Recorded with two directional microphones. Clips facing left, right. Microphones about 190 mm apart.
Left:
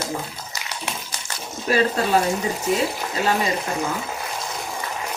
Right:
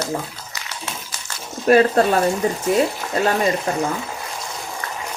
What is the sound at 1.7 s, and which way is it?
Speech, 60° right (ahead or behind).